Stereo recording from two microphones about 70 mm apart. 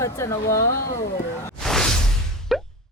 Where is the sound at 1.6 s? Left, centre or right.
Centre.